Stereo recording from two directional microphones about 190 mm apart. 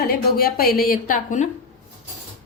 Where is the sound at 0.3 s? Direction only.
55° left (ahead or behind).